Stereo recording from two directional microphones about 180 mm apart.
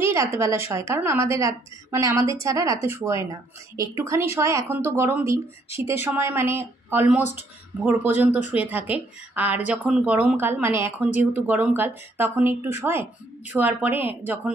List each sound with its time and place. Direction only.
0.0 s a woman's voice: 15° right (ahead or behind)